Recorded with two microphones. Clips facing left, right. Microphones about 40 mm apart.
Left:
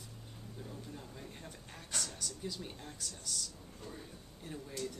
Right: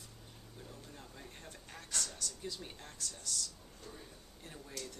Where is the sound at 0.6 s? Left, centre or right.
Centre.